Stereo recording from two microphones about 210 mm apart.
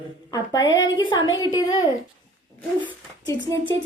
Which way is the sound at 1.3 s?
20° left (ahead or behind).